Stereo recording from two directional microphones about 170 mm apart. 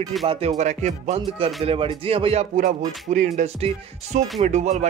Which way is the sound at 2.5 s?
50° right (ahead or behind).